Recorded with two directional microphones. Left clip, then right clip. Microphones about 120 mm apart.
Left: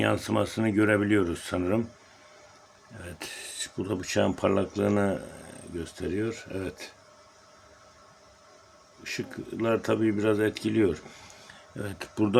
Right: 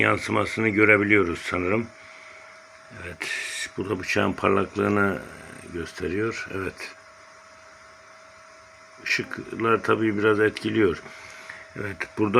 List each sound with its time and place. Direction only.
0.0 s speech: 35° left (ahead or behind)
3.0 s speech: 35° left (ahead or behind)
3.8 s speech: 20° left (ahead or behind)
9.0 s speech: 15° left (ahead or behind)
11.8 s speech: 30° left (ahead or behind)